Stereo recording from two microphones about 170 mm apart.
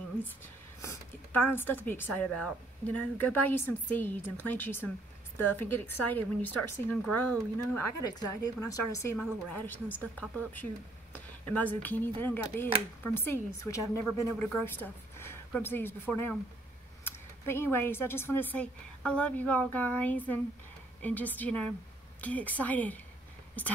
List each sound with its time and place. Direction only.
0.8 s a woman's voice: 10° left (ahead or behind)
8.0 s a woman's voice: 20° left (ahead or behind)
11.5 s a woman's voice: 10° left (ahead or behind)